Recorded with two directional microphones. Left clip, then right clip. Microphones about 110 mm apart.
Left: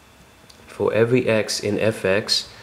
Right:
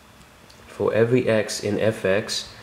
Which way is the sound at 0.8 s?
25° left (ahead or behind).